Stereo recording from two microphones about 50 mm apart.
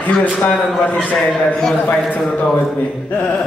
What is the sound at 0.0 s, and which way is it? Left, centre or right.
Speech, left.